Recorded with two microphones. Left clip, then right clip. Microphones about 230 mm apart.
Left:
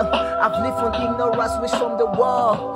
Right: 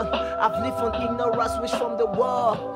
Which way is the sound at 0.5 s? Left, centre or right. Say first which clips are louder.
Left 4 dB; left.